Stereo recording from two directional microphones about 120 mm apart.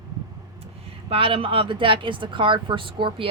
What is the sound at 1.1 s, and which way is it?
Speech, 50° right (ahead or behind).